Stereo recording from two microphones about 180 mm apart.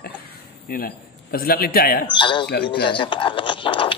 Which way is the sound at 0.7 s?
55° left (ahead or behind).